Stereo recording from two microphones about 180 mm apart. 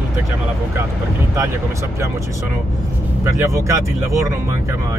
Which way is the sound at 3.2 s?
15° right (ahead or behind).